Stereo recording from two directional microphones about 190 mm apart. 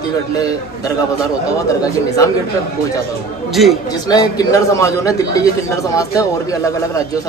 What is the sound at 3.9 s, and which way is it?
A man's voice, 20° left (ahead or behind).